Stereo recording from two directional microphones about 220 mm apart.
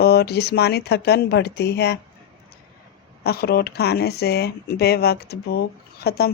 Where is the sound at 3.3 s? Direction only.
45° left (ahead or behind).